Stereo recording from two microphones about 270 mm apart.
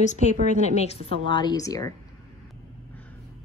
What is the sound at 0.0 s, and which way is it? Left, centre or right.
A woman's voice, left.